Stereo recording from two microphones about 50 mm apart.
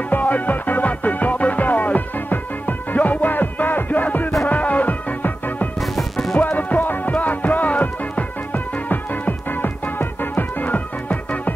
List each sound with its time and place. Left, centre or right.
0.1 s music: left
5.8 s music: centre
6.3 s music: left